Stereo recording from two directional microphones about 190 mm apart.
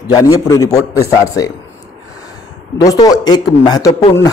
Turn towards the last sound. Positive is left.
turn(degrees=15)  # may be behind; listen again after turning